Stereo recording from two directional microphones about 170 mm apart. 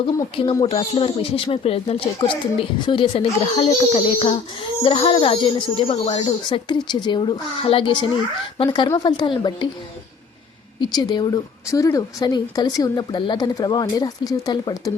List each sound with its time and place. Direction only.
0.0 s speech: 30° left (ahead or behind)
10.8 s speech: 25° left (ahead or behind)